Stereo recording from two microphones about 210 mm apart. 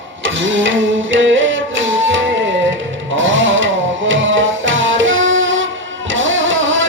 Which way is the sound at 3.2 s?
65° right (ahead or behind).